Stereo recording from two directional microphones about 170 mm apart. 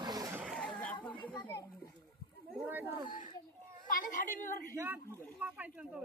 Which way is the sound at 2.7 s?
10° right (ahead or behind).